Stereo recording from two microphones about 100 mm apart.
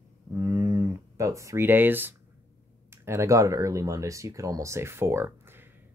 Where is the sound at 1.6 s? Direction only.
20° right (ahead or behind).